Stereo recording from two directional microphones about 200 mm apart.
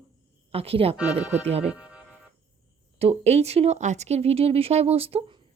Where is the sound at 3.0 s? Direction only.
30° right (ahead or behind).